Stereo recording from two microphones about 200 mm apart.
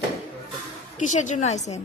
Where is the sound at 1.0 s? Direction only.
40° left (ahead or behind).